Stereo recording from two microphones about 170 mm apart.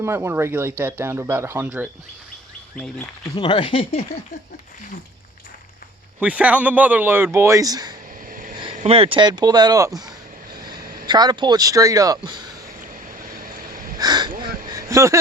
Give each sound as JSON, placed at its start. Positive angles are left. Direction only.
{"t": 0.0, "sound": "speech", "side_deg": -15}
{"t": 3.3, "sound": "speech", "side_deg": 30}
{"t": 6.1, "sound": "speech", "side_deg": -5}
{"t": 8.3, "sound": "vehicle", "side_deg": -55}
{"t": 8.5, "sound": "speech", "side_deg": -30}
{"t": 13.1, "sound": "vehicle", "side_deg": -60}
{"t": 14.0, "sound": "a sound", "side_deg": -25}